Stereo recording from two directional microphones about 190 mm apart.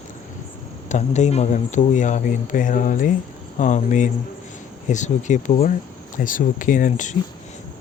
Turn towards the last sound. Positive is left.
turn(degrees=40)  # may be behind; listen again after turning